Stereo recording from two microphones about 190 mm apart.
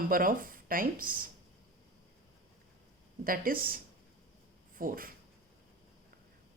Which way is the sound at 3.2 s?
50° right (ahead or behind).